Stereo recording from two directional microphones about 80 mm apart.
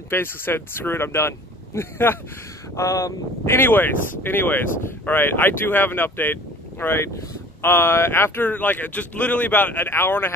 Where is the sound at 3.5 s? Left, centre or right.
Left.